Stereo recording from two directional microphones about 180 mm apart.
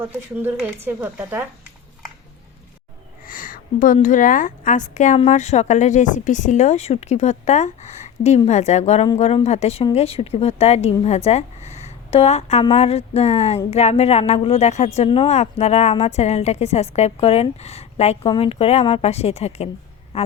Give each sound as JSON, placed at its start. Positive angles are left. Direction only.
{"t": 0.0, "sound": "speech", "side_deg": -15}
{"t": 3.2, "sound": "a woman's voice", "side_deg": 50}
{"t": 20.1, "sound": "a sound", "side_deg": 35}